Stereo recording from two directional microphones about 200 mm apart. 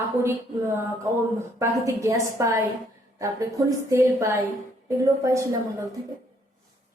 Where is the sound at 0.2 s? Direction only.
10° right (ahead or behind).